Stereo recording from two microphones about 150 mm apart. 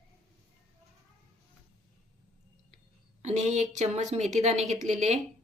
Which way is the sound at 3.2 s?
50° right (ahead or behind).